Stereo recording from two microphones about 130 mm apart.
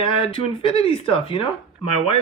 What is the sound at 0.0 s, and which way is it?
Speech, 45° left (ahead or behind).